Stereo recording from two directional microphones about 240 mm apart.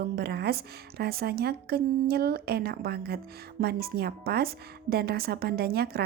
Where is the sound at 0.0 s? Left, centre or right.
Right.